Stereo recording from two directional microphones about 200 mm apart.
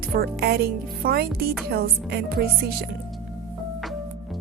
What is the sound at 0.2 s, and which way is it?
Speech, 55° right (ahead or behind).